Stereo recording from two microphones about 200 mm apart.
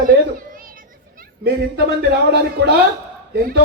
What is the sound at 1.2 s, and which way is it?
A man's voice, 55° right (ahead or behind).